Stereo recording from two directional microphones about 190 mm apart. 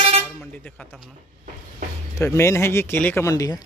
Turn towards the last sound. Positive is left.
turn(degrees=20)  # may be behind; listen again after turning